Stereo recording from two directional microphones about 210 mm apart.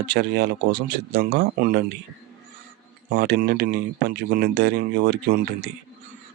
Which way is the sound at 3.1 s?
50° right (ahead or behind).